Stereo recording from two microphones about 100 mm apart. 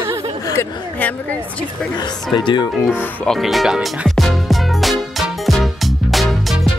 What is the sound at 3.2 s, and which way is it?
Music, centre (ahead or behind).